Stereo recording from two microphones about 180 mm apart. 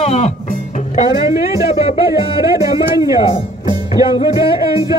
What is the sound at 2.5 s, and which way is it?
Speech, 20° right (ahead or behind).